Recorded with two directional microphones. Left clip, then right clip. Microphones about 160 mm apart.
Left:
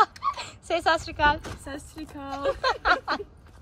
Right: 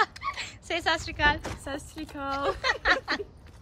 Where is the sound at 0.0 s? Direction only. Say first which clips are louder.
Left 5 dB; 5° right (ahead or behind).